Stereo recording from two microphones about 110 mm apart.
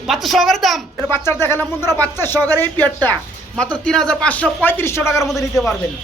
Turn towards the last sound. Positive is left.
turn(degrees=0)  # may be behind; listen again after turning